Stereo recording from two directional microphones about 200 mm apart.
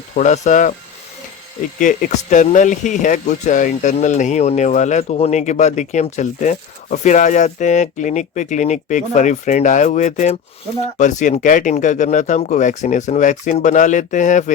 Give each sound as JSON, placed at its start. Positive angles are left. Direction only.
{"t": 0.2, "sound": "speech", "side_deg": 35}
{"t": 1.8, "sound": "speech", "side_deg": 40}